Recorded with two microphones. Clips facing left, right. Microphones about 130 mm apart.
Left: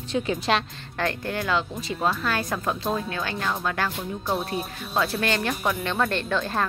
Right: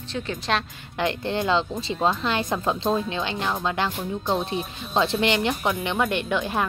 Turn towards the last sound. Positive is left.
turn(degrees=-15)  # may be behind; listen again after turning